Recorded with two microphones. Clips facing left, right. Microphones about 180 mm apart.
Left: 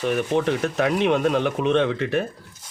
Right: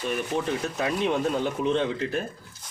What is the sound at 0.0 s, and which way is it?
Speech, 75° left (ahead or behind).